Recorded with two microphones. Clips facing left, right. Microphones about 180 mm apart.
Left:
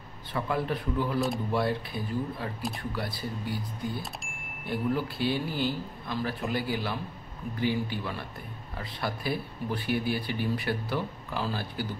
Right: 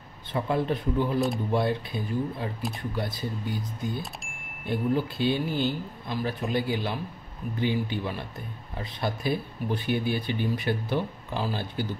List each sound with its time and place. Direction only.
0.3 s speech: 25° right (ahead or behind)
4.0 s speech: centre (ahead or behind)
4.6 s speech: 20° right (ahead or behind)